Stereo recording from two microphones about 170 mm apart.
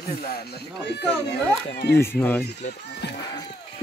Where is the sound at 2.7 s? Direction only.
80° left.